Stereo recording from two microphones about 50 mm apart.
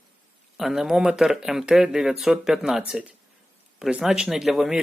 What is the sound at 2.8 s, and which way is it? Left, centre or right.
Speech, right.